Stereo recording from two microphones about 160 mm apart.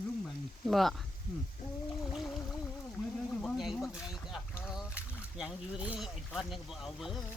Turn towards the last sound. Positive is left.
turn(degrees=0)  # may be behind; listen again after turning